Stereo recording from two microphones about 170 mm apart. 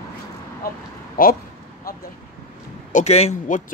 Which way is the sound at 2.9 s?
40° left (ahead or behind).